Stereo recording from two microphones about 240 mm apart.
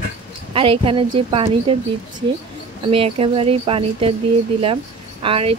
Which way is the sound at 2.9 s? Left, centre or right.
Right.